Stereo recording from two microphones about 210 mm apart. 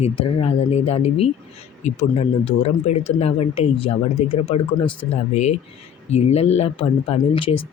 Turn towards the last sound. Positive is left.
turn(degrees=25)  # may be behind; listen again after turning